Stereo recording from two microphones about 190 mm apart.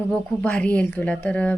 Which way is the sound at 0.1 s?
5° left (ahead or behind).